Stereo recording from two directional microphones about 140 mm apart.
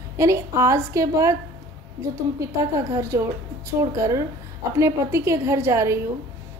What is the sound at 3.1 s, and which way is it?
A woman's voice, 20° right (ahead or behind).